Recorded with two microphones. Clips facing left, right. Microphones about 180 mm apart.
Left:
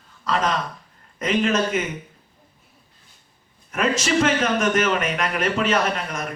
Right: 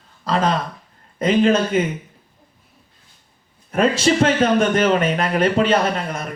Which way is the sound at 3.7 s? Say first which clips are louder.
Right 4 dB; 30° right (ahead or behind).